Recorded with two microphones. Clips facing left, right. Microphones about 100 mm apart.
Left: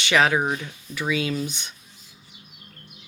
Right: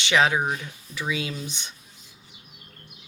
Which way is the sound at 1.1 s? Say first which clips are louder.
Left 6 dB; 25° right (ahead or behind).